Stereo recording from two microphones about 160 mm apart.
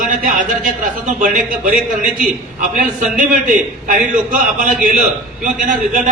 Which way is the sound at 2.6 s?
55° right (ahead or behind).